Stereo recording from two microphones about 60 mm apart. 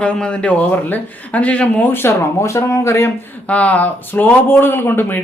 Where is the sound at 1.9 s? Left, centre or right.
Left.